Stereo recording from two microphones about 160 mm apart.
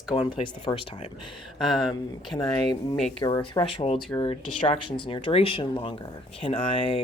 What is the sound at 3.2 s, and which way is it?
Speech, 30° left (ahead or behind).